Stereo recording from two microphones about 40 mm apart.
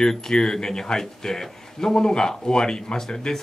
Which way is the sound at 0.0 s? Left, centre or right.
Centre.